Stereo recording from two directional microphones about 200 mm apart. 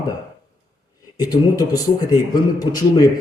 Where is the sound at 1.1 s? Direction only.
20° left (ahead or behind).